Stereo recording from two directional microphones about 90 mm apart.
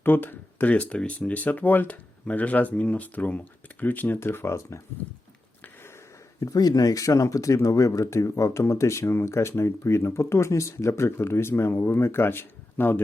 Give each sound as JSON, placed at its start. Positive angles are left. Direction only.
{"t": 0.0, "sound": "speech", "side_deg": 20}
{"t": 6.4, "sound": "speech", "side_deg": 45}